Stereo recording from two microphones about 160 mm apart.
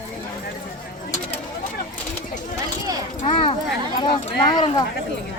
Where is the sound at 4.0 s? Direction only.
30° left (ahead or behind).